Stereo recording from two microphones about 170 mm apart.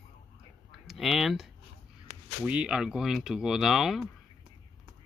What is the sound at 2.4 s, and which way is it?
Speech, 5° right (ahead or behind).